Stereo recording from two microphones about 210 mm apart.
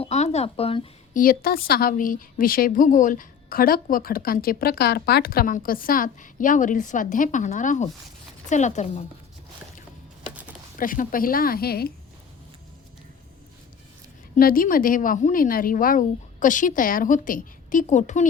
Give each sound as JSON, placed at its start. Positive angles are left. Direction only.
{"t": 0.0, "sound": "a sound", "side_deg": 30}
{"t": 1.1, "sound": "a woman's voice", "side_deg": 45}
{"t": 10.8, "sound": "a woman's voice", "side_deg": 40}
{"t": 14.3, "sound": "a woman's voice", "side_deg": 45}